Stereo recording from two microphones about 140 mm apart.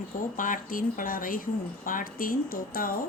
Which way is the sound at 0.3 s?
75° left (ahead or behind).